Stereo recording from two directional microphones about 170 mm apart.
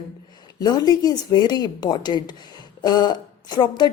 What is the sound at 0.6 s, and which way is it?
A woman's voice, 25° left (ahead or behind).